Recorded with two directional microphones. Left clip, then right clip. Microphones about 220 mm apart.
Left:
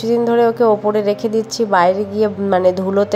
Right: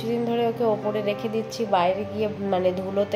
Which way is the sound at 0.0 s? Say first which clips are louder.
Left 11 dB; 35° left (ahead or behind).